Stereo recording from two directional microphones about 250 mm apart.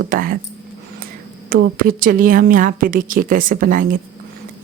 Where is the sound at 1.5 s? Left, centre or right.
Right.